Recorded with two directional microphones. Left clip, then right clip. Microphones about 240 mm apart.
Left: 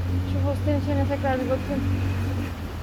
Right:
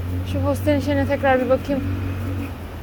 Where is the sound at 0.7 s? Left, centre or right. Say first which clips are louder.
Right 6 dB; right.